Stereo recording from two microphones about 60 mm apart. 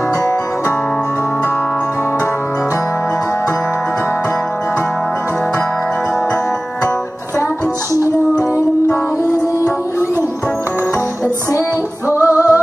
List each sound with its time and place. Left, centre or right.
12.2 s music: right